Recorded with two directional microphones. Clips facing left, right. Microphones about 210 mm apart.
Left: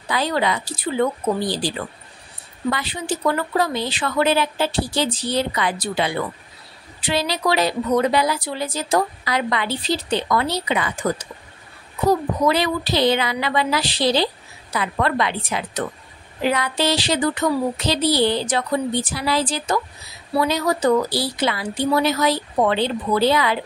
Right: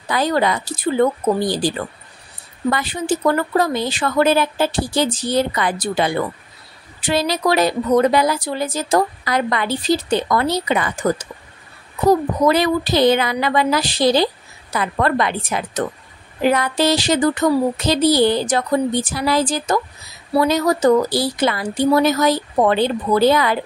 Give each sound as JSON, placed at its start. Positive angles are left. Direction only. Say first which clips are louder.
{"t": 0.1, "sound": "a woman's voice", "louder": "right 3 dB", "side_deg": -45}